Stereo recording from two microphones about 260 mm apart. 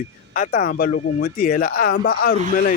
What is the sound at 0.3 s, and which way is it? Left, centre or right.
A man's voice, left.